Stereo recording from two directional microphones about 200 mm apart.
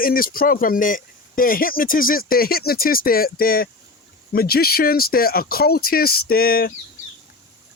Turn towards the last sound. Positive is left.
turn(degrees=45)  # may be behind; listen again after turning